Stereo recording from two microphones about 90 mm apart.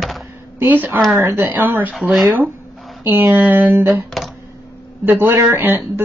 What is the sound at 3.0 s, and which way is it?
Speech, 20° right (ahead or behind).